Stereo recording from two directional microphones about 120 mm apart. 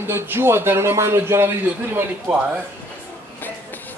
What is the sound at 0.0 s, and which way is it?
Speech, 20° right (ahead or behind).